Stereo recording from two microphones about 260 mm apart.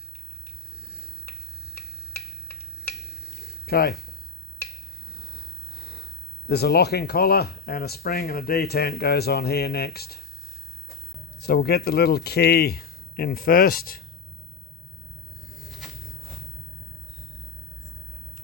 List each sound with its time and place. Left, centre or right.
3.2 s a sound: left
5.3 s snort: left
6.5 s speech: left
11.3 s speech: left